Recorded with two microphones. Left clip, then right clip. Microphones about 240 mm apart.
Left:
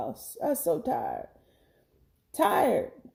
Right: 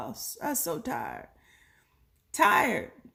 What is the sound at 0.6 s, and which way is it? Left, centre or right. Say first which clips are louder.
Speech: left 6 dB; right.